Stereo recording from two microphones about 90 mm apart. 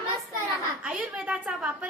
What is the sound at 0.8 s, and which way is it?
A woman's voice, 15° right (ahead or behind).